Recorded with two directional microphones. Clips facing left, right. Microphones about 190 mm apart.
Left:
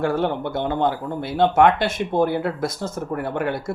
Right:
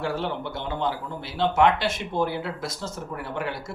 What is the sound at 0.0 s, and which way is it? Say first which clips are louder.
Speech: left 7 dB; 55° left (ahead or behind).